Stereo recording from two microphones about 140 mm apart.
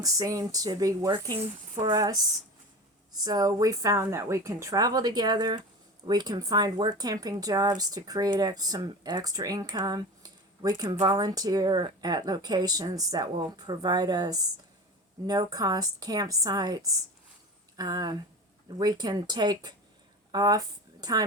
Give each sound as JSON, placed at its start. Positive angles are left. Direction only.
{"t": 0.0, "sound": "a woman's voice", "side_deg": -25}